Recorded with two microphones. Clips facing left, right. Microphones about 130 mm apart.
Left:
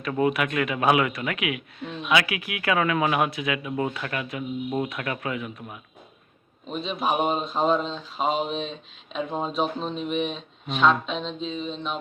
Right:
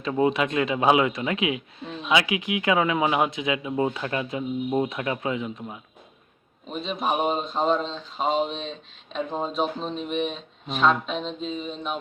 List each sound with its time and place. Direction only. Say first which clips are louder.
0.0 s speech: right 1 dB; 25° right (ahead or behind)
6.7 s speech: even; centre (ahead or behind)